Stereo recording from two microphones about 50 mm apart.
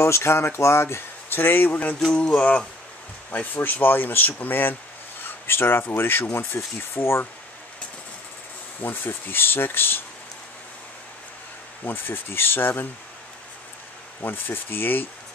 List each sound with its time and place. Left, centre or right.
0.0 s speech: left
2.1 s a sound: left
3.3 s speech: left
8.8 s speech: left
11.8 s speech: left
14.2 s speech: left